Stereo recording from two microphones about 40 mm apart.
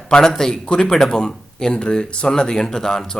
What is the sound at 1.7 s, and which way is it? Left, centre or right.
Speech, left.